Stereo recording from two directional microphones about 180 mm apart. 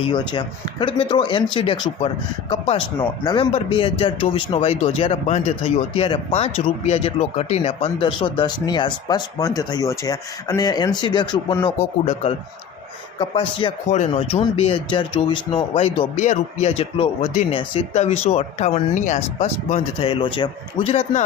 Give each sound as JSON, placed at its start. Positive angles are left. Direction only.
{"t": 0.0, "sound": "a man's voice", "side_deg": 25}
{"t": 11.8, "sound": "a man's voice", "side_deg": 35}